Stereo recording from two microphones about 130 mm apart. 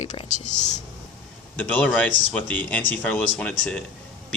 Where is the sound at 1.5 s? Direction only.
10° left (ahead or behind).